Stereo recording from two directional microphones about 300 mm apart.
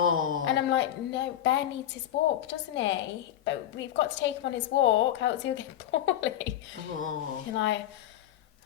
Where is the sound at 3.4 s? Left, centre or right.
Left.